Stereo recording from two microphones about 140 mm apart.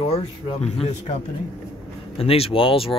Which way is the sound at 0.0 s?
45° left (ahead or behind).